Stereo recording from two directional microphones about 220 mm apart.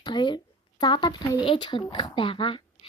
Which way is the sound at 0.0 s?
20° left (ahead or behind).